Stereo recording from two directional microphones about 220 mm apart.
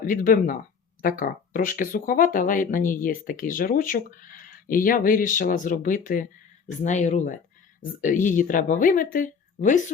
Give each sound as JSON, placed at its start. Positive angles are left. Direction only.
{"t": 0.0, "sound": "speech", "side_deg": 40}